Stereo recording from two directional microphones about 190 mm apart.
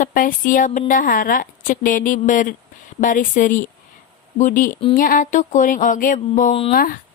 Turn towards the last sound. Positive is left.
turn(degrees=50)  # may be behind; listen again after turning